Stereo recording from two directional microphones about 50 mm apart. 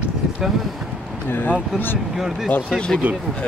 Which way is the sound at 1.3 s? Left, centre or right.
Left.